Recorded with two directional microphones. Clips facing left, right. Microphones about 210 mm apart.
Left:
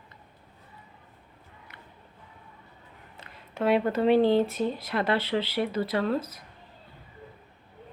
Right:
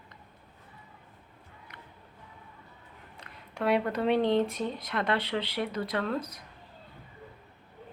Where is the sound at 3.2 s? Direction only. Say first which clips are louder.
Left 4 dB; centre (ahead or behind).